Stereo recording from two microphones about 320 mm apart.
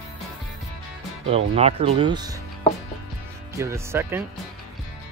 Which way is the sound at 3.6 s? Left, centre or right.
Centre.